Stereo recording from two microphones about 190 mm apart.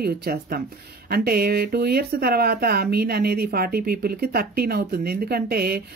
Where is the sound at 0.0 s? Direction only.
55° right (ahead or behind).